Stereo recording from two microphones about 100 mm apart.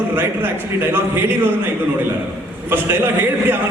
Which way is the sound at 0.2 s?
20° right (ahead or behind).